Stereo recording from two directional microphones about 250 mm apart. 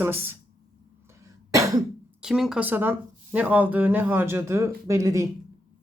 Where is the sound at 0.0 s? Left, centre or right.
Centre.